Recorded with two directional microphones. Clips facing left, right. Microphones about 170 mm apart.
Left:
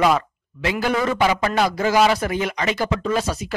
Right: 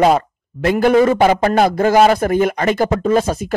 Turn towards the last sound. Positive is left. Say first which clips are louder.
# right 7 dB
turn(degrees=-50)  # may be behind; listen again after turning